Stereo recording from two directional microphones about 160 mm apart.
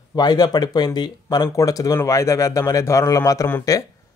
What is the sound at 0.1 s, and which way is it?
Speech, 25° left (ahead or behind).